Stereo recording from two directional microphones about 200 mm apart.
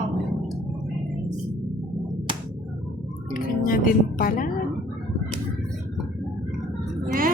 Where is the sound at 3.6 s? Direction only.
45° left (ahead or behind).